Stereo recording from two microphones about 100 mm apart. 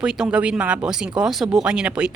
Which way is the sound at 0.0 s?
10° right (ahead or behind).